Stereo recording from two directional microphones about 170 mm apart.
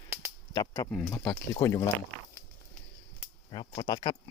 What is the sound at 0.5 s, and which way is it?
Speech, 20° left (ahead or behind).